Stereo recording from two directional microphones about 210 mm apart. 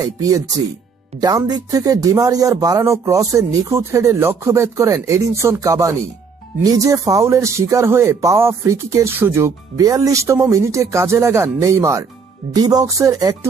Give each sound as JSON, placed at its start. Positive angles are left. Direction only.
{"t": 0.0, "sound": "speech", "side_deg": -15}